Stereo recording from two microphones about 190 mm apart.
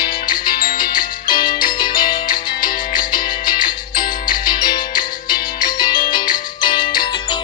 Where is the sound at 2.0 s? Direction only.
45° left (ahead or behind).